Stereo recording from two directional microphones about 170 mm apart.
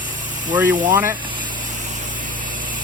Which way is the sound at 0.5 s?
15° right (ahead or behind).